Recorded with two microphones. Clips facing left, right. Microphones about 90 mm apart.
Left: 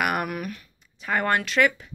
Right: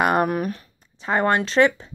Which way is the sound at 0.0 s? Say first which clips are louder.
Right 6 dB; 30° right (ahead or behind).